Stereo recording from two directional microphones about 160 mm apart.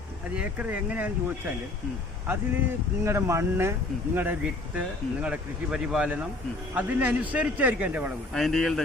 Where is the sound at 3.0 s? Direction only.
15° right (ahead or behind).